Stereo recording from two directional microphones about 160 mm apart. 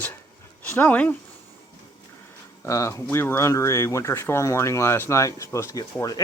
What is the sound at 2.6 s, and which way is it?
Speech, 15° left (ahead or behind).